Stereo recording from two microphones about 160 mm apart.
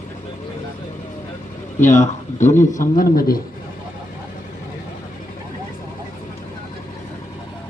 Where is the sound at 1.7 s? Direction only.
45° left (ahead or behind); by 3.4 s 65° left (ahead or behind).